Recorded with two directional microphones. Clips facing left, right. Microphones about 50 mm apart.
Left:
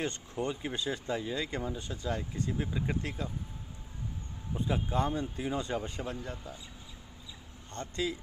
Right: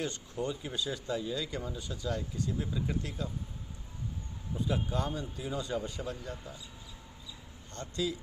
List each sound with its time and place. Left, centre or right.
0.0 s speech: left
4.5 s speech: left
7.7 s speech: left